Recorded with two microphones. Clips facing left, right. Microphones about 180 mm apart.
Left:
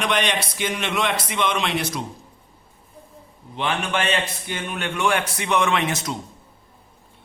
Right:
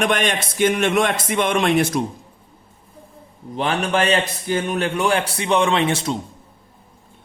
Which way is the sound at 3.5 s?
40° right (ahead or behind).